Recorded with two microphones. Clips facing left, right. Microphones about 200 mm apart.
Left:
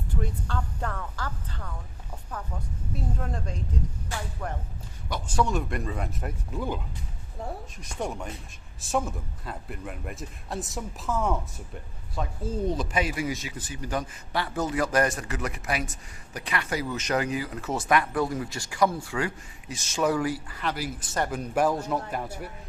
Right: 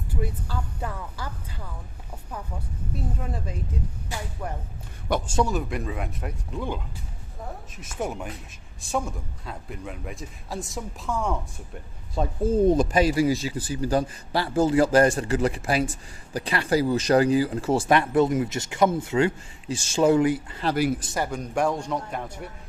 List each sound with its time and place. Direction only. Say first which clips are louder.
0.1 s a man's voice: right 1 dB; 5° right (ahead or behind)
5.2 s speech: left 1 dB; 25° right (ahead or behind)
5.5 s a man's voice: right 1 dB; centre (ahead or behind)
7.8 s a man's voice: right 3 dB; 5° right (ahead or behind)
12.5 s speech: right 10 dB; 50° right (ahead or behind); by 20.7 s 25° right (ahead or behind)
21.2 s a man's voice: left 1 dB; 5° left (ahead or behind)